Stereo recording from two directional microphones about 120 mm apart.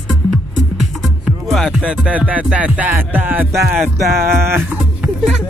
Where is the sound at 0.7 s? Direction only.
Centre (ahead or behind).